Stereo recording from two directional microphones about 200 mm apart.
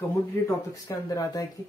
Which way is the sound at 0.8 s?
15° left (ahead or behind).